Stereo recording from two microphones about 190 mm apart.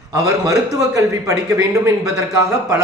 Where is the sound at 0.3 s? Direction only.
15° right (ahead or behind).